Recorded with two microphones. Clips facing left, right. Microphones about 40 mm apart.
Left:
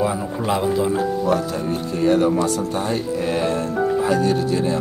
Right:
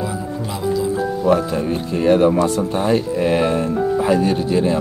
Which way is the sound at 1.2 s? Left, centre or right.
Right.